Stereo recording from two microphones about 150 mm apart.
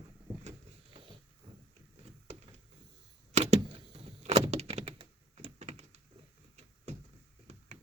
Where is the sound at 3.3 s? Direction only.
45° right (ahead or behind).